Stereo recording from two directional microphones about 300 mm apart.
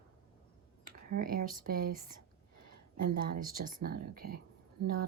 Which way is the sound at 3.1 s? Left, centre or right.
Right.